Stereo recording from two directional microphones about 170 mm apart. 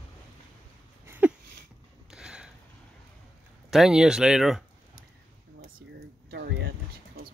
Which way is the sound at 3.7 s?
Centre (ahead or behind).